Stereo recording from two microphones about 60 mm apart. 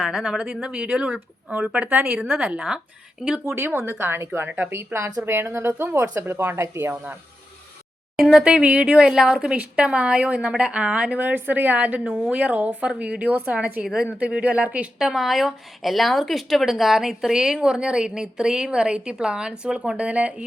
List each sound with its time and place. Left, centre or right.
0.0 s a woman's voice: centre; by 2.2 s right
2.2 s a woman's voice: centre
3.4 s a woman's voice: right
4.4 s speech: right
4.7 s a woman's voice: right
8.2 s speech: centre
8.4 s a woman's voice: centre
13.8 s a woman's voice: centre
14.9 s a woman's voice: centre